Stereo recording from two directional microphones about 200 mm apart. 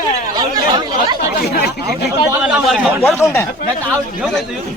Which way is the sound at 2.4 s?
5° right (ahead or behind).